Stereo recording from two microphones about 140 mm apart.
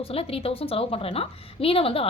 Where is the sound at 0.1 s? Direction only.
45° left (ahead or behind).